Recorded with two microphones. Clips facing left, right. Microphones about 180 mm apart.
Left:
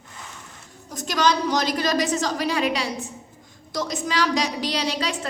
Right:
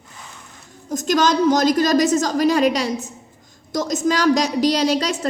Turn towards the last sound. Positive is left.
turn(degrees=-40)  # may be behind; listen again after turning